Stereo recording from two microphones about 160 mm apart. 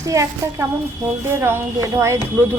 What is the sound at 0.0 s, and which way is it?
A woman's voice, 20° right (ahead or behind).